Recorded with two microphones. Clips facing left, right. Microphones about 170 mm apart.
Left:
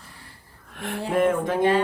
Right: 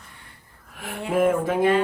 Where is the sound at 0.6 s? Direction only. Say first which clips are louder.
Left 4 dB; 5° right (ahead or behind).